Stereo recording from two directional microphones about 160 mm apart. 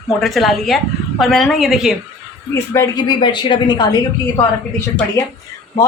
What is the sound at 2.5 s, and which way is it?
A woman's voice, 20° left (ahead or behind).